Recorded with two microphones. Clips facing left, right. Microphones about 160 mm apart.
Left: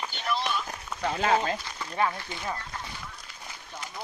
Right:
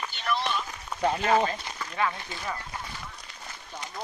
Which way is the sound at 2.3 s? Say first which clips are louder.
Left 1 dB; 20° left (ahead or behind).